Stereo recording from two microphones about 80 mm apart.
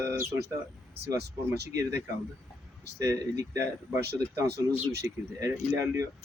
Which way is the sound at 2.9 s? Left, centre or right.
Right.